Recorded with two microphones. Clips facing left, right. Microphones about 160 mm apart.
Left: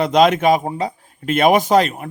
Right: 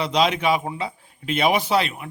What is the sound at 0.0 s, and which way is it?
A man's voice, 50° left (ahead or behind).